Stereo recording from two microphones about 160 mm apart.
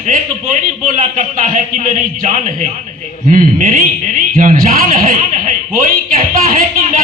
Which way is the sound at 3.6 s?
60° right (ahead or behind).